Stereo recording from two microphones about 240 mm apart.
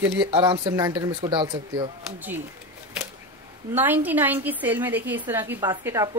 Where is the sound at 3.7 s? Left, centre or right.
Centre.